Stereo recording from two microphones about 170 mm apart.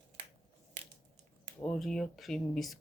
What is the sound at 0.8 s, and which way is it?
Crushing, 50° right (ahead or behind).